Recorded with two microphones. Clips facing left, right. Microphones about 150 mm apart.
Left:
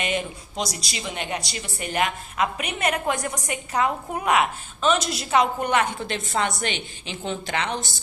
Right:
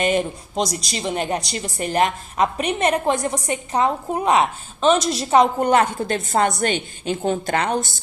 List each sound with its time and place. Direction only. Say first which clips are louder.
0.0 s a woman's voice: right 7 dB; 40° right (ahead or behind)